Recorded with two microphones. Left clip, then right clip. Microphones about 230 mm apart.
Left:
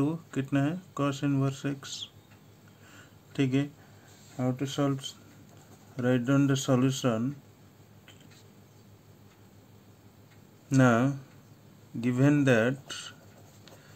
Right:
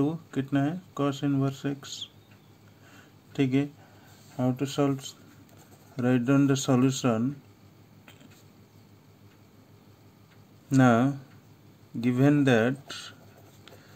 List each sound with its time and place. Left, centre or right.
0.0 s speech: centre
2.9 s a sound: centre
4.4 s speech: centre
10.7 s speech: centre